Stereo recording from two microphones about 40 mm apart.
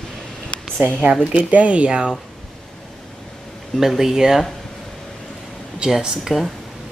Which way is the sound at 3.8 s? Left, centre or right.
Centre.